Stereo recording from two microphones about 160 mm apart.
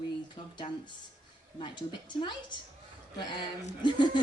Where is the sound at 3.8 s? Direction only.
30° left (ahead or behind).